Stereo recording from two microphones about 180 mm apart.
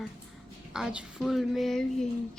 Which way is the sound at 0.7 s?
5° right (ahead or behind).